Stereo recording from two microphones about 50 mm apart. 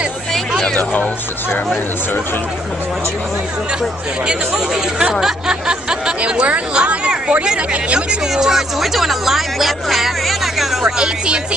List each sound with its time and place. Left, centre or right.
4.3 s speech: centre
6.2 s speech: right
8.3 s speech: centre
10.8 s speech: centre